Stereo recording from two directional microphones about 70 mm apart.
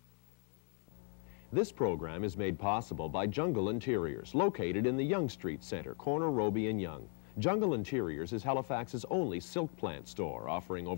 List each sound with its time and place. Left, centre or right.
1.5 s speech: left